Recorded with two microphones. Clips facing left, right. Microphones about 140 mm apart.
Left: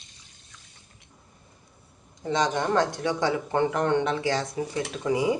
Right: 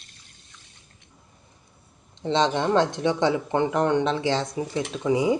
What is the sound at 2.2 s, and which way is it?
Speech, 25° right (ahead or behind).